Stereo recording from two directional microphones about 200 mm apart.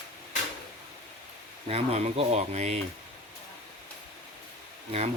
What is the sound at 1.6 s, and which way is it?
Speech, 30° right (ahead or behind).